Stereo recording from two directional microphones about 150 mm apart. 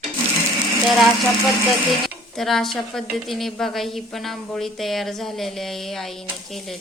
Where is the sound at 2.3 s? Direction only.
Centre (ahead or behind).